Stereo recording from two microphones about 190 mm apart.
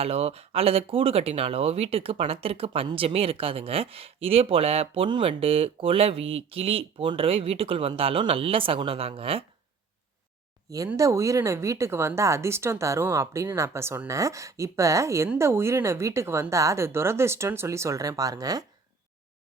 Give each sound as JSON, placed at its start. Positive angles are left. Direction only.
{"t": 0.0, "sound": "speech", "side_deg": -30}
{"t": 10.8, "sound": "speech", "side_deg": -15}